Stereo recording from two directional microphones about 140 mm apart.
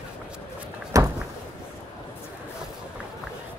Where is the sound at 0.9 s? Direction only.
25° right (ahead or behind).